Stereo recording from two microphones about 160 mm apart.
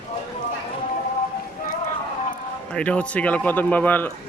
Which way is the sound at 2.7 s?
5° left (ahead or behind).